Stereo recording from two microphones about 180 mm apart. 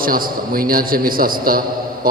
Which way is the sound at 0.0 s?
55° right (ahead or behind).